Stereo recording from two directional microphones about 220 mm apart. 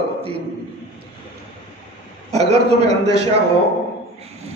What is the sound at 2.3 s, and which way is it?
Speech, 90° right.